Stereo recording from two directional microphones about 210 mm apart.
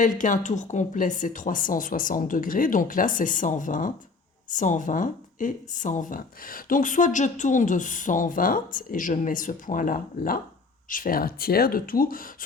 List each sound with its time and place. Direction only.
0.0 s a woman's voice: 35° left (ahead or behind)